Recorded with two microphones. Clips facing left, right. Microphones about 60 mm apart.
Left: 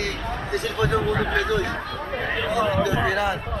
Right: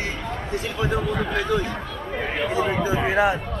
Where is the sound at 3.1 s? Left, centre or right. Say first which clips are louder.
Right 3 dB; right.